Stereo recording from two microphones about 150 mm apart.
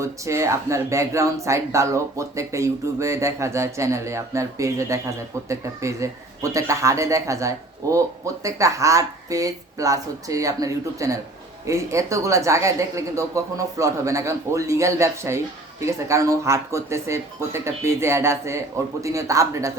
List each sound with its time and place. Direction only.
0.0 s speech: 20° right (ahead or behind)